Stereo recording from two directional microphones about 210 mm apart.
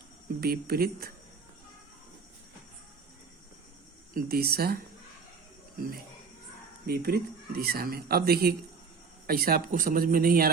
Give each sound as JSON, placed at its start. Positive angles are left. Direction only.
{"t": 0.3, "sound": "speech", "side_deg": -45}
{"t": 4.1, "sound": "speech", "side_deg": -45}
{"t": 6.8, "sound": "speech", "side_deg": -45}